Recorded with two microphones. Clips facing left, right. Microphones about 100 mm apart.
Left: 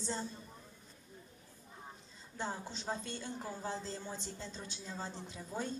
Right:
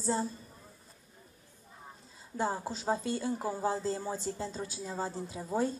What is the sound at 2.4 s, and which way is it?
Speech, 45° right (ahead or behind).